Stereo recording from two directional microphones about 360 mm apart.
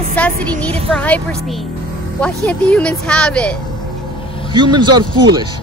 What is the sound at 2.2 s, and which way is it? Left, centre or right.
Speech, centre.